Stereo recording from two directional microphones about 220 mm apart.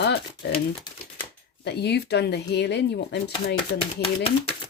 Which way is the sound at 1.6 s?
50° left (ahead or behind).